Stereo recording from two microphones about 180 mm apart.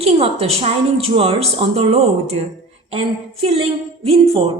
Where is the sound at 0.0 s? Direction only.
35° right (ahead or behind).